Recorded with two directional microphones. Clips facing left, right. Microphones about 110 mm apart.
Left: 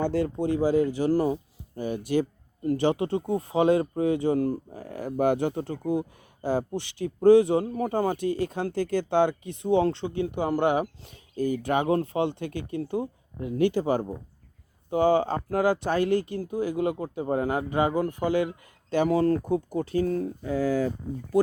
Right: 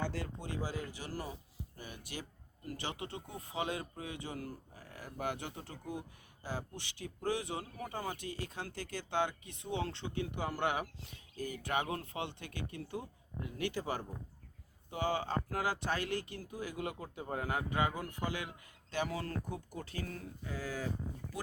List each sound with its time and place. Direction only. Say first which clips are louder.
0.2 s speech: left 16 dB; 45° left (ahead or behind)
10.0 s speech: left 11 dB; 35° left (ahead or behind)
19.1 s speech: left 17 dB; 40° left (ahead or behind)
20.4 s speech: left 13 dB; 70° left (ahead or behind)